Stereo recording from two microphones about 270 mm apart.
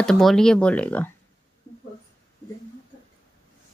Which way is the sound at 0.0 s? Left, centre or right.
Centre.